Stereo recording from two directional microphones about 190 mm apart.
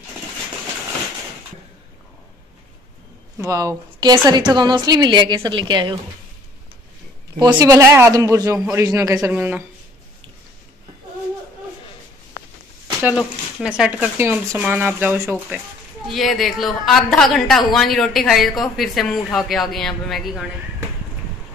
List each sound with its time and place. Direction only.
3.3 s a woman's voice: 15° right (ahead or behind)
7.3 s speech: 20° right (ahead or behind)
13.0 s speech: 5° right (ahead or behind)
16.1 s speech: centre (ahead or behind)